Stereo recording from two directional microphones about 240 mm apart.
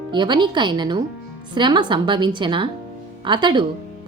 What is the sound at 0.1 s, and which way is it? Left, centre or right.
A woman's voice, centre.